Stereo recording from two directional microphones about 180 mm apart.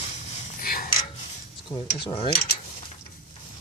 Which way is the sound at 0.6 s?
55° left (ahead or behind).